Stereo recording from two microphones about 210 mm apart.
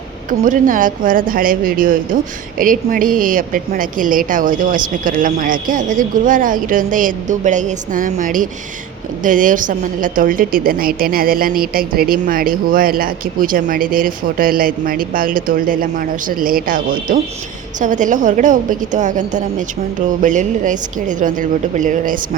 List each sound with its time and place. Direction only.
0.3 s a woman's voice: 40° right (ahead or behind)